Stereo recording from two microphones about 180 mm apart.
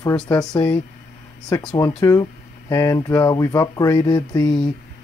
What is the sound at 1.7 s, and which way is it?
Speech, 20° left (ahead or behind).